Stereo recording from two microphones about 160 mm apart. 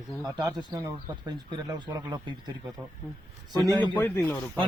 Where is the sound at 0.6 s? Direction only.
25° right (ahead or behind).